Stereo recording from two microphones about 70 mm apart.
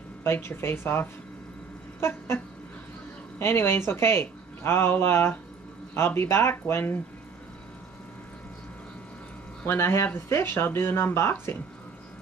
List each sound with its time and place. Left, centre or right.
0.2 s speech: left
2.0 s a sound: left
3.3 s speech: left
9.7 s speech: left